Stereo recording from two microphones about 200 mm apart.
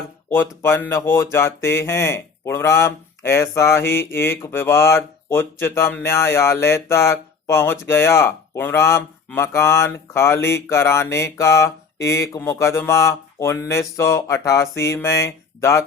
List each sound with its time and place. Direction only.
0.3 s speech: 10° left (ahead or behind)